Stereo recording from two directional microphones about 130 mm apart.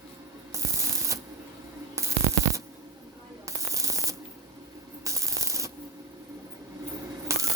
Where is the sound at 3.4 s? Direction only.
25° right (ahead or behind).